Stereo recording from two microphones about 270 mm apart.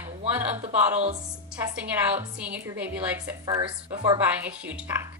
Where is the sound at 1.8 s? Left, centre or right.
Centre.